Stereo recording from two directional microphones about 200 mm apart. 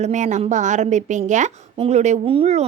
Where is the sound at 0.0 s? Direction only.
35° right (ahead or behind).